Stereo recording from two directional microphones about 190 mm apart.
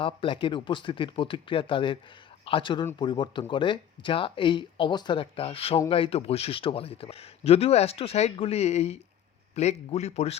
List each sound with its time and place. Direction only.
0.0 s a man's voice: 25° left (ahead or behind)